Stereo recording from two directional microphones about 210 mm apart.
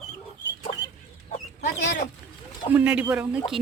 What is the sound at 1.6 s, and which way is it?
Speech, 55° left (ahead or behind).